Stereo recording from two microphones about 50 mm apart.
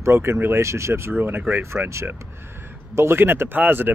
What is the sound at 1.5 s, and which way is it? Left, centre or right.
Speech, right.